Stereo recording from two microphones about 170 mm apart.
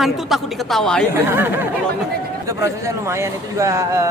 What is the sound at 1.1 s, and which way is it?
Speech, 10° right (ahead or behind).